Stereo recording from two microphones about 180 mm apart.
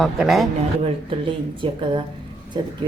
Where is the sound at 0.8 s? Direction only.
30° right (ahead or behind).